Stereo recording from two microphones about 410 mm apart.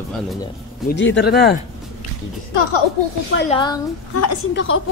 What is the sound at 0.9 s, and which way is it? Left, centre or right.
Speech, left.